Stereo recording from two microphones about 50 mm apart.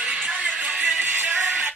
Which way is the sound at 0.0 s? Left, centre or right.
Centre.